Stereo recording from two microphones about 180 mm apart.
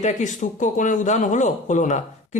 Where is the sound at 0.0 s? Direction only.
45° left (ahead or behind).